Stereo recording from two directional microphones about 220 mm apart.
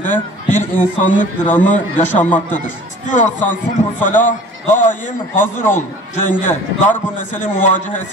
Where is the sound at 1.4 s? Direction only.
10° left (ahead or behind).